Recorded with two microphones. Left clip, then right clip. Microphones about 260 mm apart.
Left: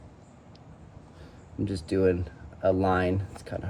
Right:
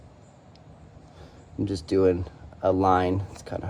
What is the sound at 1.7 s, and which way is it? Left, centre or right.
Speech, centre.